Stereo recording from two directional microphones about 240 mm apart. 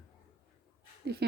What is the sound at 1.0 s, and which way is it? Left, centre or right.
Speech, right.